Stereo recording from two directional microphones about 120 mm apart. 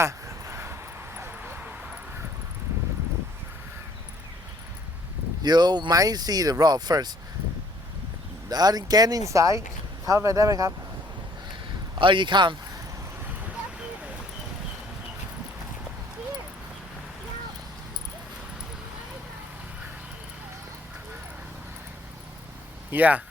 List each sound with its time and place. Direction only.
0.0 s a sound: 25° right (ahead or behind)
5.4 s speech: 35° right (ahead or behind)
8.4 s speech: 35° right (ahead or behind)
11.9 s speech: 45° right (ahead or behind)
22.9 s speech: 15° right (ahead or behind)